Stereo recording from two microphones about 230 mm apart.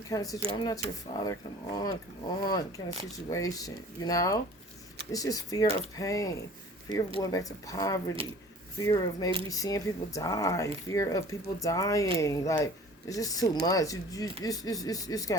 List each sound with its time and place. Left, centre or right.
0.1 s speech: centre